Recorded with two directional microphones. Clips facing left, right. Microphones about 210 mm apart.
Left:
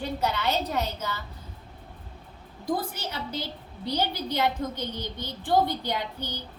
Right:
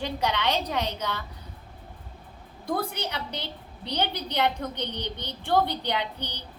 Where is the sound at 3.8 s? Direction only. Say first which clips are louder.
Left 1 dB; 5° left (ahead or behind).